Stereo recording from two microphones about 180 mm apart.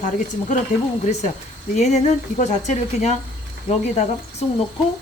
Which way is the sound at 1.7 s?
40° left (ahead or behind).